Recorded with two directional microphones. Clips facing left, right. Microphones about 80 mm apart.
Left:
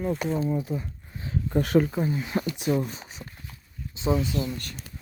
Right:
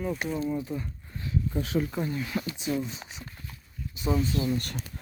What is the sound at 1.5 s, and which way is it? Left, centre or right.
Speech, left.